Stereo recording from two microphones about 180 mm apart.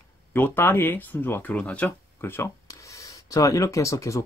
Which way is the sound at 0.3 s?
10° left (ahead or behind).